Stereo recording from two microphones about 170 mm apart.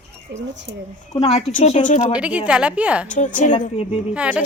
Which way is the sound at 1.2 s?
40° left (ahead or behind).